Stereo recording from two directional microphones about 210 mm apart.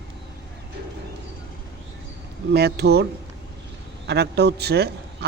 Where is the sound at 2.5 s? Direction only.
50° right (ahead or behind).